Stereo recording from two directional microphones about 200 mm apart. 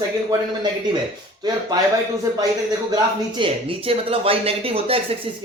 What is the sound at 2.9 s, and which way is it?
Speech, 25° right (ahead or behind).